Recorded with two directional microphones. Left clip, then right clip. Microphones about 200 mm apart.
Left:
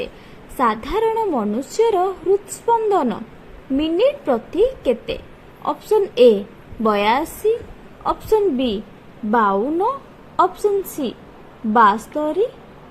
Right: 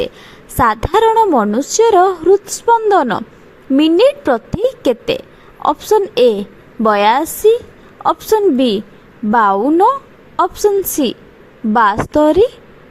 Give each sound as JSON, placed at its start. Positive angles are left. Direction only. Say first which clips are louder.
{"t": 0.5, "sound": "a woman's voice", "louder": "right 7 dB", "side_deg": -45}